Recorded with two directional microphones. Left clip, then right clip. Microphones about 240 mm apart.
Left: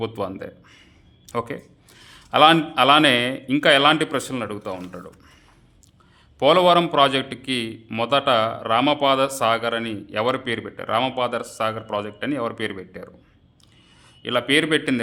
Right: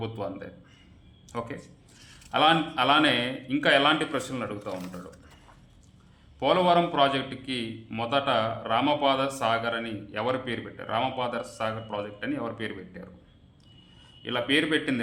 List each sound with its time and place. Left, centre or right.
0.0 s a man's voice: left
6.4 s a man's voice: left
14.2 s a man's voice: left